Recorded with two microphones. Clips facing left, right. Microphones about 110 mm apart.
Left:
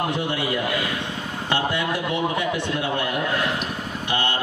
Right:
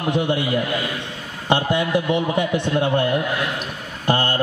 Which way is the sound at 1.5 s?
20° right (ahead or behind).